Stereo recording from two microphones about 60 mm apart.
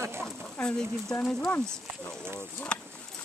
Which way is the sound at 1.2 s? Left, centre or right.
Centre.